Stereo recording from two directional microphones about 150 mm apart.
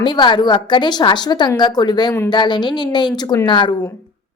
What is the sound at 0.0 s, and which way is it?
A woman's voice, 30° left (ahead or behind).